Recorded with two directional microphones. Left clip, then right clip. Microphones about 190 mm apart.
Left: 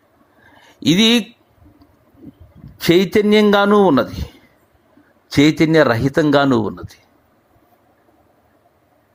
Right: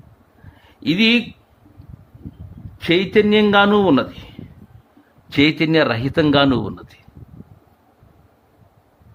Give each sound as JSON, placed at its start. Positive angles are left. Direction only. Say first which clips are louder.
{"t": 0.6, "sound": "speech", "louder": "left 3 dB", "side_deg": 30}
{"t": 2.7, "sound": "speech", "louder": "left 2 dB", "side_deg": 30}